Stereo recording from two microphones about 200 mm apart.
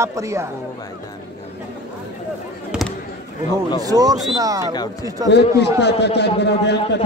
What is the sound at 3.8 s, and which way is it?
Speech, 20° right (ahead or behind).